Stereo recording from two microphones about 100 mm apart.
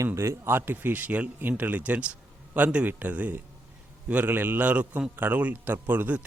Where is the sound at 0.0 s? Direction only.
30° right (ahead or behind).